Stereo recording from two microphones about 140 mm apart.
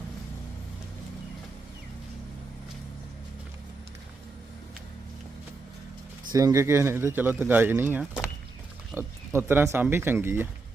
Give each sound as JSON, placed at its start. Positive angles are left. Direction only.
{"t": 6.3, "sound": "speech", "side_deg": -25}